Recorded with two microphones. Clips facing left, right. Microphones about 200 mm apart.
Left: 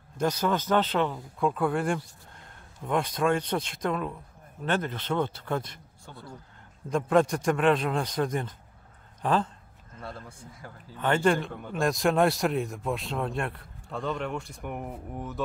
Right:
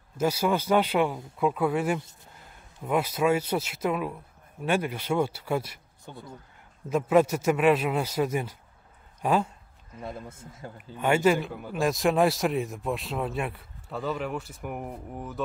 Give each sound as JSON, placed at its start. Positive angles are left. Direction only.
{"t": 0.2, "sound": "a man's voice", "side_deg": -10}
{"t": 11.0, "sound": "a man's voice", "side_deg": -10}